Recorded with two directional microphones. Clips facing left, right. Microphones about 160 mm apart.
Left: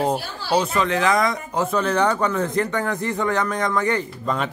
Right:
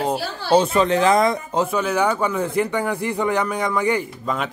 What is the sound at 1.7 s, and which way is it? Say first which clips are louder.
A man's voice: left 2 dB; 5° right (ahead or behind).